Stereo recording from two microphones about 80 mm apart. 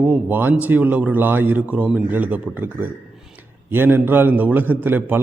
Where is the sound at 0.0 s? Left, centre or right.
Centre.